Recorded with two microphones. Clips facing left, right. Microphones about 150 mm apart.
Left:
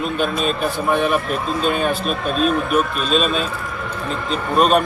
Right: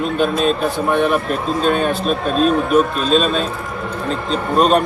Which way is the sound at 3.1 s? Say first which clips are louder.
Right 3 dB; 5° left (ahead or behind).